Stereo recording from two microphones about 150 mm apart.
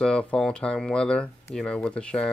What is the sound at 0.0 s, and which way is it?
Speech, 5° left (ahead or behind).